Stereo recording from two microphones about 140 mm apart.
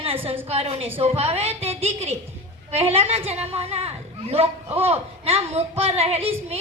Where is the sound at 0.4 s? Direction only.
45° right (ahead or behind).